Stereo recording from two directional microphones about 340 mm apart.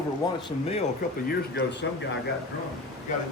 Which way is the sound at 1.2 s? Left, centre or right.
Left.